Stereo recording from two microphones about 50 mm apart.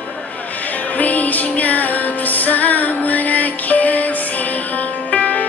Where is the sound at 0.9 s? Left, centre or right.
Left.